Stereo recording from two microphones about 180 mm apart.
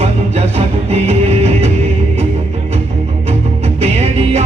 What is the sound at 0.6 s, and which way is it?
Music, 35° right (ahead or behind).